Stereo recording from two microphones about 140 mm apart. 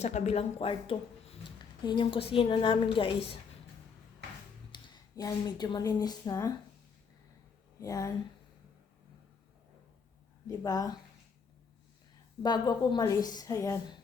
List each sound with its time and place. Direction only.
0.0 s speech: 55° left (ahead or behind); by 3.1 s 40° left (ahead or behind)
4.7 s speech: 30° left (ahead or behind)
7.8 s a woman's voice: 25° left (ahead or behind)
10.4 s a woman's voice: 25° left (ahead or behind)
12.4 s a woman's voice: 30° left (ahead or behind)